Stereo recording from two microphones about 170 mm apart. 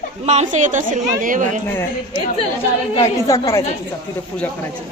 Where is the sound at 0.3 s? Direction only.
45° right (ahead or behind).